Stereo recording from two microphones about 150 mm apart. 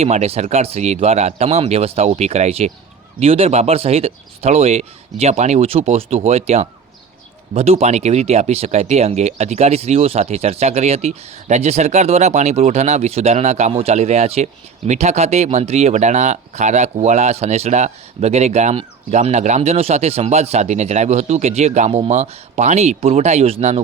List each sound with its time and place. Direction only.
0.0 s speech: 45° right (ahead or behind)